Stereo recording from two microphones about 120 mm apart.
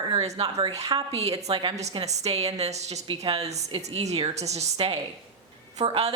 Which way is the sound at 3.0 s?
50° right (ahead or behind).